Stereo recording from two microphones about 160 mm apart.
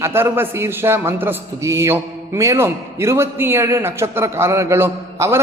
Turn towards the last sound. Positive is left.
turn(degrees=-15)  # may be behind; listen again after turning